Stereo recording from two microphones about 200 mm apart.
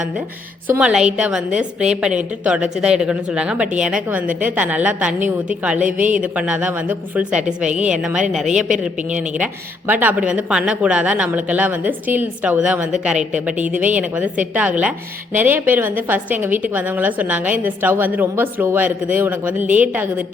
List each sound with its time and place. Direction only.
0.7 s a woman's voice: 5° right (ahead or behind)
9.3 s a woman's voice: 5° right (ahead or behind)